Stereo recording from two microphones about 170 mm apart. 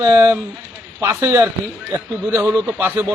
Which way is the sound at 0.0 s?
15° right (ahead or behind).